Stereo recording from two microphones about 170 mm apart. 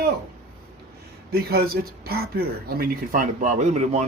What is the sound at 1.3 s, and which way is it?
Speech, 65° right (ahead or behind).